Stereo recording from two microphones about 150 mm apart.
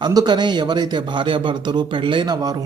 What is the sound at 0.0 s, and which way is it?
A man's voice, 25° right (ahead or behind).